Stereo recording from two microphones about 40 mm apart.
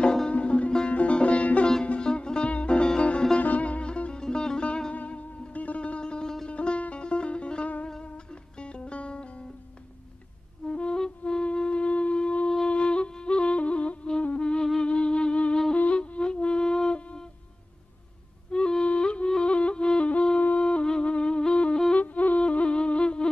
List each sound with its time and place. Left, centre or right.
0.0 s music: centre
0.3 s music: left
2.0 s music: left
4.9 s music: left
10.7 s music: left
11.4 s shofar: left
12.6 s music: left
14.4 s music: left
18.5 s music: left
21.9 s music: left
22.4 s music: left